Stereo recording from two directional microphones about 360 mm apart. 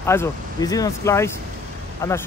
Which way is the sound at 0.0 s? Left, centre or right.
Centre.